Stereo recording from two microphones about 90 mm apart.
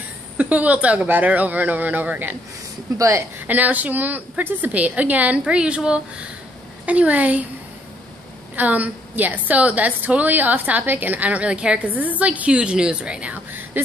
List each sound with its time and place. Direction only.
0.4 s speech: 15° right (ahead or behind)
3.0 s speech: 35° right (ahead or behind)
3.3 s a woman's voice: 20° right (ahead or behind)
8.5 s a woman's voice: 20° right (ahead or behind)